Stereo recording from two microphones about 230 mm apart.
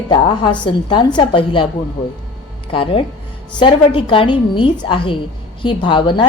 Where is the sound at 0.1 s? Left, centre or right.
Centre.